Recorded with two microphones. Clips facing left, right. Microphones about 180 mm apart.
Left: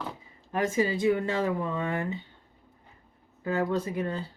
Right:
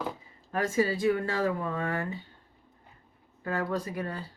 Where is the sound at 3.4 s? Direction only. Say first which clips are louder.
Left 3 dB; 20° left (ahead or behind).